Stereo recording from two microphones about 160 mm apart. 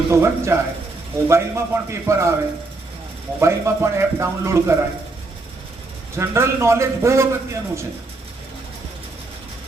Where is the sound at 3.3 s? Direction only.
15° right (ahead or behind).